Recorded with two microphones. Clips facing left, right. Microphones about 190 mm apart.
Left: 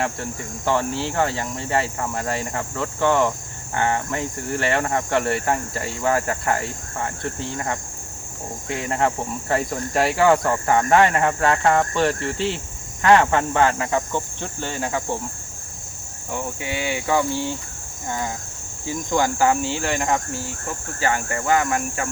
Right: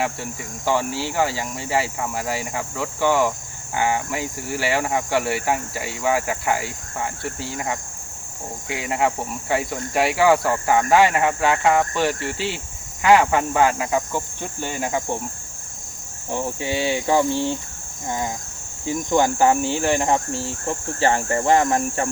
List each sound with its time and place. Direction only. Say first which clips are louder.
0.0 s speech: even; 5° right (ahead or behind)
16.3 s cricket: right 3 dB; 30° right (ahead or behind)